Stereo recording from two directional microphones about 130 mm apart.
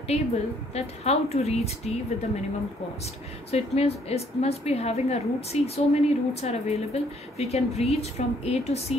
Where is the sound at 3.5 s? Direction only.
50° left (ahead or behind).